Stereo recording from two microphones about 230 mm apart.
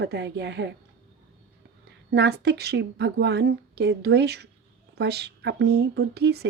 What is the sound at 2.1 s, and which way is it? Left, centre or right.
A woman's voice, right.